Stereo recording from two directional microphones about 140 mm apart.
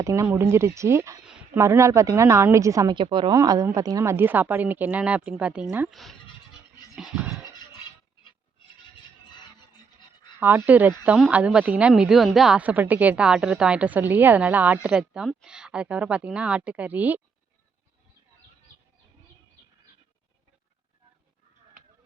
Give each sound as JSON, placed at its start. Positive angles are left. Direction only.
{"t": 0.0, "sound": "a woman's voice", "side_deg": -20}
{"t": 1.2, "sound": "a sound", "side_deg": -5}
{"t": 1.5, "sound": "a woman's voice", "side_deg": -20}
{"t": 2.9, "sound": "a woman's voice", "side_deg": -35}
{"t": 5.9, "sound": "music", "side_deg": 0}
{"t": 10.4, "sound": "a woman's voice", "side_deg": -15}